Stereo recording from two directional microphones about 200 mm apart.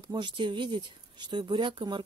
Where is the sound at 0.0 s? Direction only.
25° right (ahead or behind).